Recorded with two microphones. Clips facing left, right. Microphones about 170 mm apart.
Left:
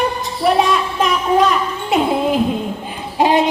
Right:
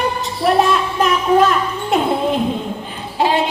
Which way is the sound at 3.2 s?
20° left (ahead or behind).